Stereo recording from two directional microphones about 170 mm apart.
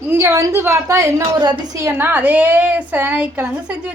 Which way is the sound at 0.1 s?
15° right (ahead or behind).